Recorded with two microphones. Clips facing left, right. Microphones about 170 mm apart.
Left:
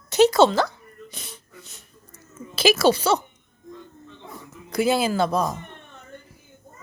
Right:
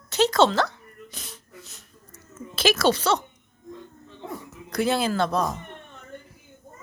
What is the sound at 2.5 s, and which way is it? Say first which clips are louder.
Speech: left 3 dB; 5° left (ahead or behind).